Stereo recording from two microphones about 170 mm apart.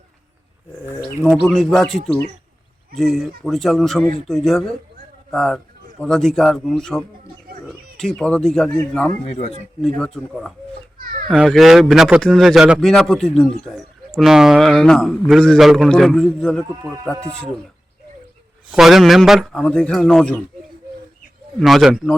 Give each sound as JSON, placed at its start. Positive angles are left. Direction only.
{"t": 1.2, "sound": "speech", "side_deg": 0}
{"t": 9.2, "sound": "speech", "side_deg": 40}
{"t": 9.8, "sound": "speech", "side_deg": 5}
{"t": 18.7, "sound": "speech", "side_deg": 0}
{"t": 21.6, "sound": "speech", "side_deg": 0}